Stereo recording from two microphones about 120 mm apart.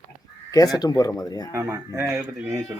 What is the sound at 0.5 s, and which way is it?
Speech, 30° left (ahead or behind).